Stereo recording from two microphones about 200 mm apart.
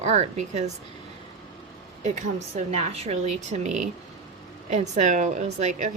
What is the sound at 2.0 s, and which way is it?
Speech, 35° right (ahead or behind).